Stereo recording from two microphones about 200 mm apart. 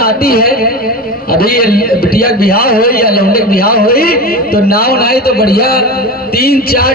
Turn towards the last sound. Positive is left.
turn(degrees=50)  # may be behind; listen again after turning